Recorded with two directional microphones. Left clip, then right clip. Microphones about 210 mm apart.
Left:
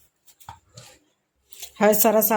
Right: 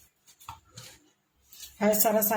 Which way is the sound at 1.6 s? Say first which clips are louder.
Left 7 dB; 50° left (ahead or behind).